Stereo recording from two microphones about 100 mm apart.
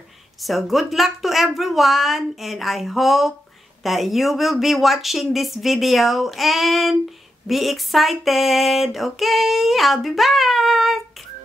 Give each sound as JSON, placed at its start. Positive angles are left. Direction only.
{"t": 0.4, "sound": "speech", "side_deg": 0}